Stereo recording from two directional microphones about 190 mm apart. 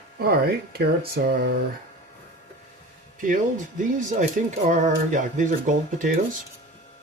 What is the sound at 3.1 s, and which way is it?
Speech, 45° right (ahead or behind).